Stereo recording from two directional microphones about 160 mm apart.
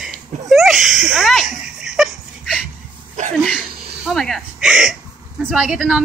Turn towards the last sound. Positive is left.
turn(degrees=-5)  # may be behind; listen again after turning